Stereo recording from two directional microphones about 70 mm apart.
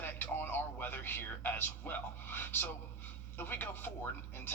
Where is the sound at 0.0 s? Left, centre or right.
Left.